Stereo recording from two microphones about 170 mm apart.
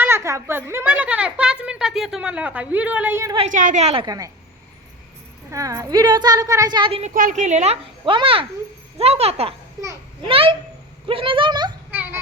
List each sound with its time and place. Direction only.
0.0 s a sound: 15° right (ahead or behind)
0.7 s speech: 10° right (ahead or behind)
3.5 s a woman's voice: 50° right (ahead or behind)
4.0 s speech: 20° right (ahead or behind)
5.5 s speech: 20° right (ahead or behind)
7.1 s a child's voice: 55° right (ahead or behind); by 11.7 s 25° right (ahead or behind)
11.9 s a sound: 10° right (ahead or behind)